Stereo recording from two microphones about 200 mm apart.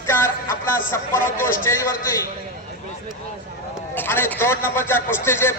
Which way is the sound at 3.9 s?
10° left (ahead or behind).